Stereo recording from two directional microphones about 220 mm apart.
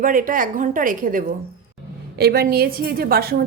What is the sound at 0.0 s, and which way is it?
A woman's voice, 40° right (ahead or behind).